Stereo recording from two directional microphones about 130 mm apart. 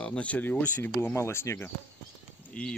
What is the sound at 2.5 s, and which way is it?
Speech, 10° left (ahead or behind).